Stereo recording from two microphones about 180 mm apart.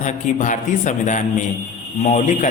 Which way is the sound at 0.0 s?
45° left (ahead or behind).